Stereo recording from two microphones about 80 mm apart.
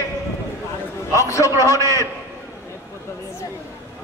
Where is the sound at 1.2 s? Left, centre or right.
Left.